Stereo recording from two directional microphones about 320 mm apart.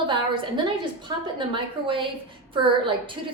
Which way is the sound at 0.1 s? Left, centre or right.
Centre.